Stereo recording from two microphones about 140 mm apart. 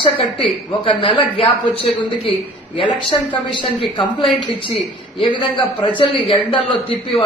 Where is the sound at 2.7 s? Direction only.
40° left (ahead or behind).